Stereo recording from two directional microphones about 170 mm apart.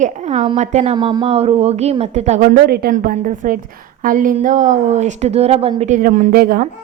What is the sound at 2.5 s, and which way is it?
Speech, 65° right (ahead or behind).